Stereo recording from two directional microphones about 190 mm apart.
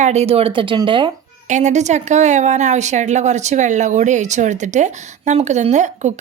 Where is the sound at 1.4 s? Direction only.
40° right (ahead or behind).